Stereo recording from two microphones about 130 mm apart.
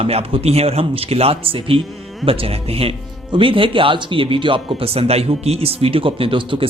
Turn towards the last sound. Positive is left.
turn(degrees=-40)  # may be behind; listen again after turning